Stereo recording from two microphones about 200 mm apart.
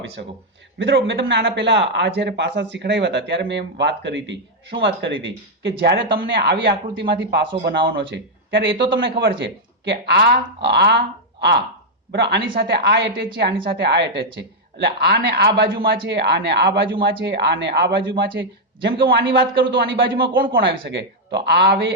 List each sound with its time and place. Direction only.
0.2 s speech: 50° right (ahead or behind)
0.8 s speech: 65° right (ahead or behind)